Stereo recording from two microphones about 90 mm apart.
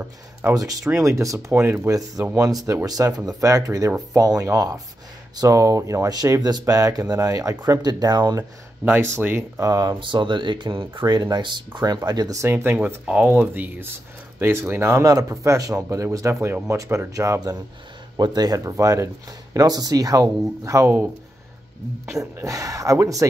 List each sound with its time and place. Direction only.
0.0 s speech: 25° right (ahead or behind)
1.5 s speech: 25° right (ahead or behind)
1.9 s speech: 40° right (ahead or behind)
9.6 s speech: 45° right (ahead or behind)
9.9 s speech: 60° right (ahead or behind); by 12.4 s 45° right (ahead or behind)
12.4 s speech: 30° right (ahead or behind)
22.2 s speech: 40° right (ahead or behind)